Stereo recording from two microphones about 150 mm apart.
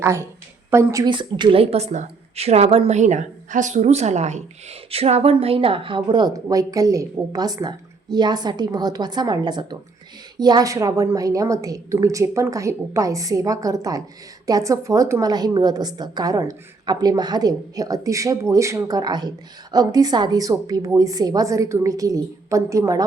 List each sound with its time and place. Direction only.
0.0 s a woman's voice: 20° right (ahead or behind)
1.1 s a woman's voice: 30° right (ahead or behind)